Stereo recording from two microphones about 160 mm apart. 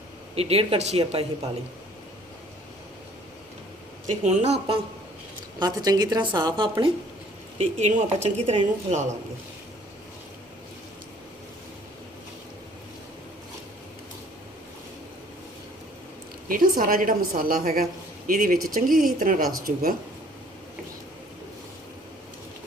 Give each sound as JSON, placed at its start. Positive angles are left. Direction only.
{"t": 0.3, "sound": "speech", "side_deg": -40}
{"t": 4.0, "sound": "speech", "side_deg": -50}
{"t": 5.5, "sound": "a woman's voice", "side_deg": -25}
{"t": 7.6, "sound": "speech", "side_deg": -45}
{"t": 16.5, "sound": "a woman's voice", "side_deg": -60}